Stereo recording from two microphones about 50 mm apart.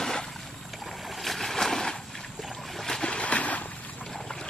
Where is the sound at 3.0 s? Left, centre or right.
Left.